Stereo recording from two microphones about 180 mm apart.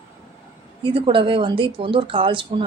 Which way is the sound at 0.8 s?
30° right (ahead or behind).